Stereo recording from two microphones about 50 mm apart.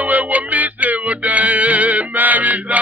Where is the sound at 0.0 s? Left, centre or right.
Right.